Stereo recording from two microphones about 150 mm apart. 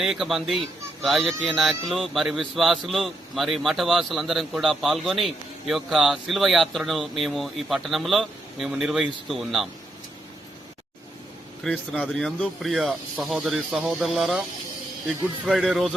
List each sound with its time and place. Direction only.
0.0 s speech: 5° right (ahead or behind)
11.6 s speech: 5° left (ahead or behind)